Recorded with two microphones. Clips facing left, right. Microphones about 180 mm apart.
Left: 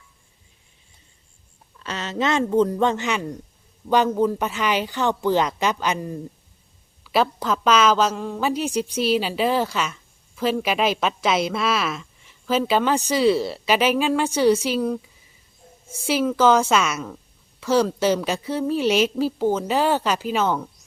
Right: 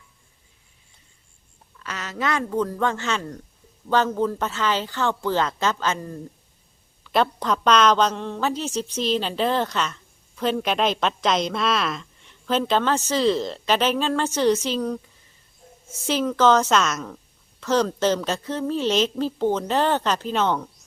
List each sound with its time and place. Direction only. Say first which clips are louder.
1.8 s a woman's voice: left 4 dB; 25° left (ahead or behind); by 20.7 s 5° left (ahead or behind)